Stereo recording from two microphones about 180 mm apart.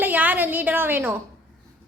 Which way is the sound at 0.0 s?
10° right (ahead or behind).